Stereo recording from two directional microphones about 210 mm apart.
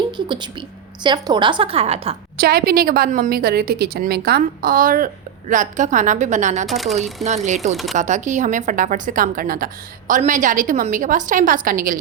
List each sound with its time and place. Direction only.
1.0 s a woman's voice: 20° right (ahead or behind)
2.4 s a woman's voice: 45° right (ahead or behind)
6.7 s speech: centre (ahead or behind)
7.3 s a woman's voice: 35° right (ahead or behind)